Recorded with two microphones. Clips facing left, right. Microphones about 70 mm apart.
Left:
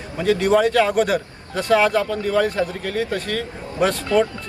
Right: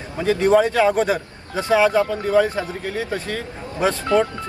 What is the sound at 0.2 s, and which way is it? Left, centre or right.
A man's voice, right.